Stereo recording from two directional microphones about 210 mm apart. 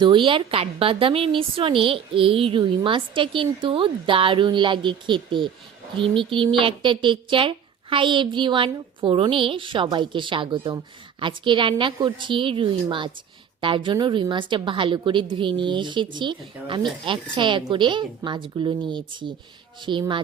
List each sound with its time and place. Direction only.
0.0 s a woman's voice: 25° right (ahead or behind)